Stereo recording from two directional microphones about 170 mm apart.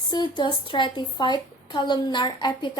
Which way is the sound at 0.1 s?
25° left (ahead or behind).